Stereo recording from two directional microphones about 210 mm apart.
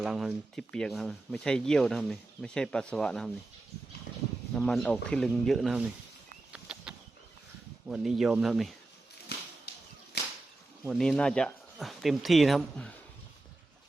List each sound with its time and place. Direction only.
0.0 s speech: 5° right (ahead or behind)
4.5 s speech: centre (ahead or behind)
6.5 s a sound: 5° right (ahead or behind)
7.9 s speech: centre (ahead or behind)
10.1 s whip: 50° left (ahead or behind)
10.8 s speech: centre (ahead or behind)